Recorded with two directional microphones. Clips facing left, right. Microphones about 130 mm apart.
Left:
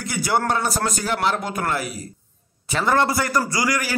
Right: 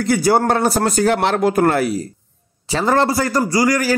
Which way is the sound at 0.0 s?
50° right (ahead or behind).